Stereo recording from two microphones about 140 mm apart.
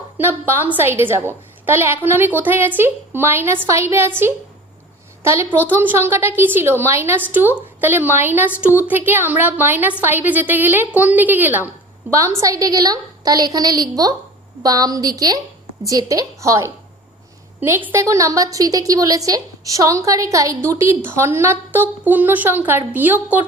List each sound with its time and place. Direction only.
0.2 s a woman's voice: 15° right (ahead or behind)